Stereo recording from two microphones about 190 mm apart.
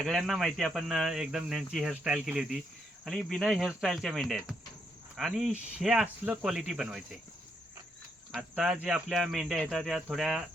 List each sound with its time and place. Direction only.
0.0 s speech: centre (ahead or behind)
8.3 s speech: 5° right (ahead or behind)